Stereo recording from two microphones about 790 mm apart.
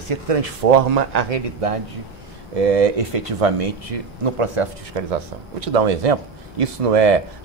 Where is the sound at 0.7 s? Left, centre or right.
Right.